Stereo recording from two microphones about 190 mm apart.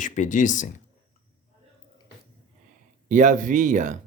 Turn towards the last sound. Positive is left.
turn(degrees=-40)  # may be behind; listen again after turning